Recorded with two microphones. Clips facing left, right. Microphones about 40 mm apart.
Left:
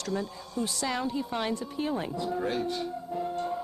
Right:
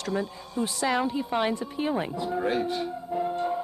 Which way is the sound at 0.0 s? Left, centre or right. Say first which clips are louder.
Right 3 dB; centre.